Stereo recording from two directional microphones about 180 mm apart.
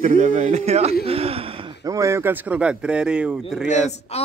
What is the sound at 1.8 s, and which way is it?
Speech, 15° right (ahead or behind).